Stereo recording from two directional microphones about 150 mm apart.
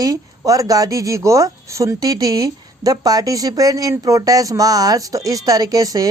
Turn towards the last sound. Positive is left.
turn(degrees=-25)  # may be behind; listen again after turning